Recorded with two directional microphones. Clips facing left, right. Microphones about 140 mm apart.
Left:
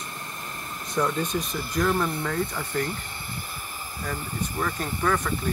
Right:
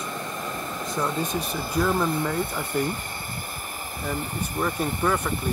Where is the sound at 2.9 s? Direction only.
45° right (ahead or behind).